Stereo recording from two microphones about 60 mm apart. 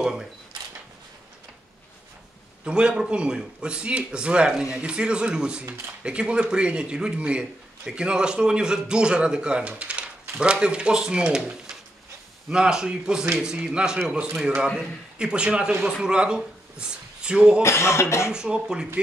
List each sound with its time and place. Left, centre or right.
0.0 s a sound: centre
2.6 s a man's voice: centre
17.6 s cough: left
18.3 s a man's voice: centre